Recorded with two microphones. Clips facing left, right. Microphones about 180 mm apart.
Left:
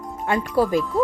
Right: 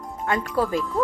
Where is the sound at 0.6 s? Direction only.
10° left (ahead or behind).